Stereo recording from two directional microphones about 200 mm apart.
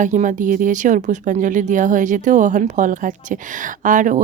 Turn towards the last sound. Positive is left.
turn(degrees=-40)  # may be behind; listen again after turning